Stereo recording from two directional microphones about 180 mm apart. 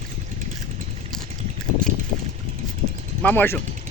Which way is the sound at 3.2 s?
10° left (ahead or behind).